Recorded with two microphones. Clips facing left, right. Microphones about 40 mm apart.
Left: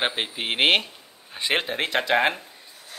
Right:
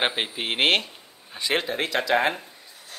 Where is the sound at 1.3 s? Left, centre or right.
Left.